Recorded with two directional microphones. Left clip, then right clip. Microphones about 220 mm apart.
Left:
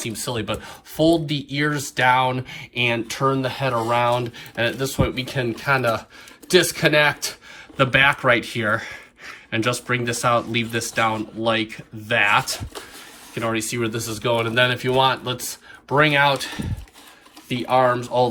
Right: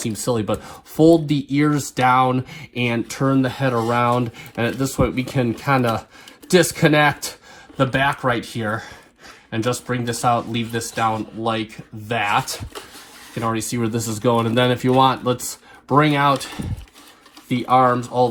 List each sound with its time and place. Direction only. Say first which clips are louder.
0.0 s speech: right 5 dB; 25° right (ahead or behind)
7.8 s speech: left 2 dB; 20° right (ahead or behind)